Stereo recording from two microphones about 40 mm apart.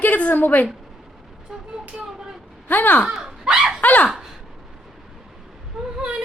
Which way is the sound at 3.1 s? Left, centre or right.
Centre.